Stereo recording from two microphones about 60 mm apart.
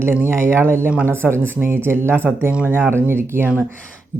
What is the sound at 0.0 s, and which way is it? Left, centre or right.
Speech, right.